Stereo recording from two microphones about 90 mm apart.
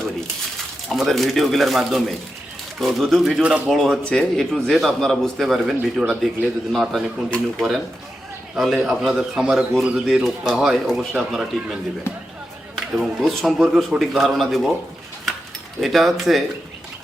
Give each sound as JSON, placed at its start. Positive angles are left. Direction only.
{"t": 0.9, "sound": "a man's voice", "side_deg": 0}
{"t": 6.0, "sound": "a man's voice", "side_deg": -10}
{"t": 12.1, "sound": "speech", "side_deg": 30}
{"t": 12.7, "sound": "a man's voice", "side_deg": 0}
{"t": 15.8, "sound": "a man's voice", "side_deg": 0}